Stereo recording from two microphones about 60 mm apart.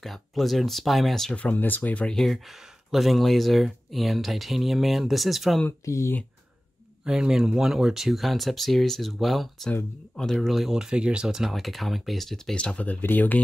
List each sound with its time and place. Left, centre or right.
0.0 s speech: centre
1.3 s speech: left
2.2 s speech: centre
5.7 s speech: left
7.1 s speech: centre
12.5 s speech: centre